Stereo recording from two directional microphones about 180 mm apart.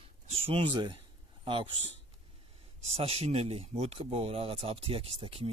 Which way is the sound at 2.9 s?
35° right (ahead or behind).